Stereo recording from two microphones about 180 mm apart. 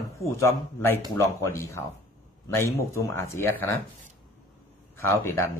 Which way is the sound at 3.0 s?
15° left (ahead or behind).